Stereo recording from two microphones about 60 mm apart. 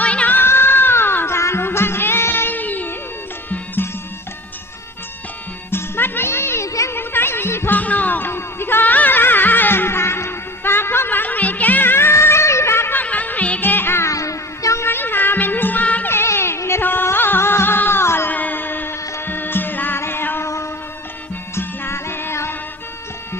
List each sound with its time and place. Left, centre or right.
0.0 s a sound: left
0.3 s music: left
5.7 s music: left
6.9 s a sound: left
7.8 s music: left
13.0 s music: left
13.6 s music: left
14.1 s music: left
14.8 s music: left
16.0 s music: left
16.8 s music: left
18.3 s a sound: left
19.2 s music: left
21.5 s music: left